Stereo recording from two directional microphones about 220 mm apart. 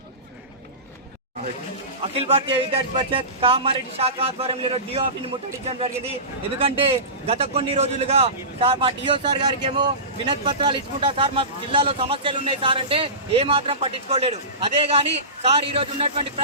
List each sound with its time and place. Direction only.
2.1 s a man's voice: 25° right (ahead or behind)
6.6 s a man's voice: 25° right (ahead or behind)